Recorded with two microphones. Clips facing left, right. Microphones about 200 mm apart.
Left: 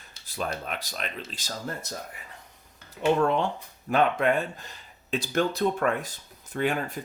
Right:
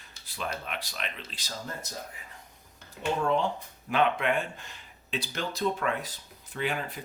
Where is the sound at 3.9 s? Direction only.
45° left (ahead or behind).